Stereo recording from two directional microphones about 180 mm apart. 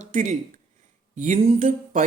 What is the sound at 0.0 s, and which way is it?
Speech, 40° right (ahead or behind).